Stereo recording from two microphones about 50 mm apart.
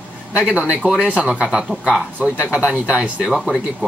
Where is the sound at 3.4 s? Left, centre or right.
Centre.